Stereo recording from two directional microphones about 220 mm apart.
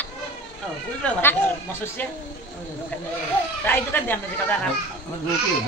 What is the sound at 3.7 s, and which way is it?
Speech, 10° left (ahead or behind).